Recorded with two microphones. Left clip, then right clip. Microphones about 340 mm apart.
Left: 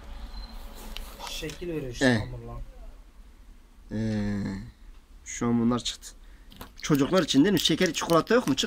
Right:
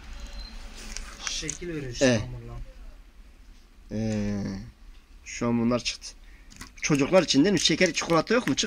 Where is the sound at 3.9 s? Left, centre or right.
Centre.